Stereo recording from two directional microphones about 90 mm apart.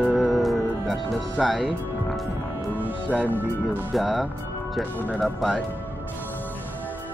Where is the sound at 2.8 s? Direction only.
20° right (ahead or behind).